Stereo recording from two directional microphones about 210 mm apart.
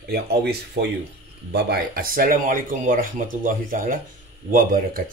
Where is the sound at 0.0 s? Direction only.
50° right (ahead or behind).